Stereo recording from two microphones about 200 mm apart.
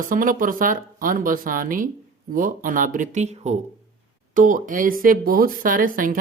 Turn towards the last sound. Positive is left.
turn(degrees=-45)  # may be behind; listen again after turning